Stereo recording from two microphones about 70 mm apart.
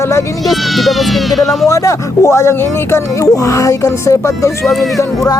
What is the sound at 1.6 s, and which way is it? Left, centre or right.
Speech, left.